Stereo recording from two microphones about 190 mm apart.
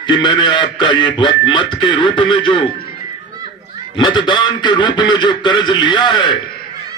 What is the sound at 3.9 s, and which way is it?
Speech, 25° left (ahead or behind).